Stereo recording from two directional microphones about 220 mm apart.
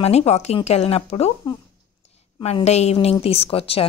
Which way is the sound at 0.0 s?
30° left (ahead or behind).